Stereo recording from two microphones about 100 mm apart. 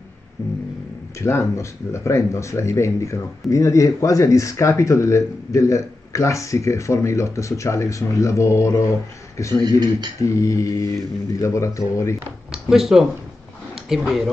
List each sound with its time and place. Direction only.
0.4 s music: 30° left (ahead or behind)
1.5 s speech: 30° left (ahead or behind)
9.7 s speech: 45° right (ahead or behind)
10.2 s speech: 30° left (ahead or behind)
12.4 s speech: 5° right (ahead or behind)